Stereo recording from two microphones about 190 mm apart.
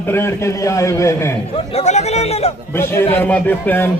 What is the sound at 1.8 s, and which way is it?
Speech, 35° left (ahead or behind).